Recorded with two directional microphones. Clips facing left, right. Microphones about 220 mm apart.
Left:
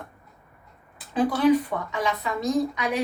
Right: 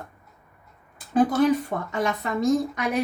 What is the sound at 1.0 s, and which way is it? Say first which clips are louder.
A woman's voice: right 3 dB; 45° right (ahead or behind).